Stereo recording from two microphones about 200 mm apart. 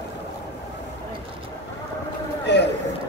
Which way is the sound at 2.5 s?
60° left (ahead or behind).